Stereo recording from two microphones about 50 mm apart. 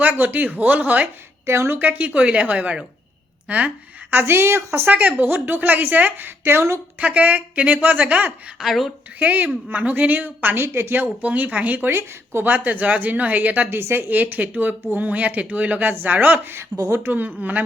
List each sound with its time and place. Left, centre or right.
0.0 s speech: right
1.5 s a woman's voice: right
1.7 s a woman's voice: right
4.1 s a woman's voice: right
4.9 s speech: right
7.0 s speech: right
8.6 s a woman's voice: centre
9.1 s speech: right
11.9 s speech: right
12.5 s speech: right
13.7 s speech: right
17.1 s speech: right